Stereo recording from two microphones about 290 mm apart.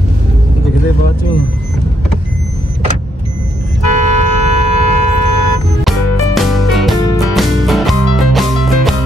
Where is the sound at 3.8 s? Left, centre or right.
Right.